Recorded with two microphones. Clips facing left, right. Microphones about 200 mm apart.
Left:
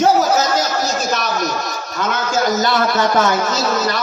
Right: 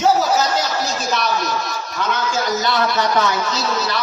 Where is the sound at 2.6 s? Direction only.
45° left (ahead or behind).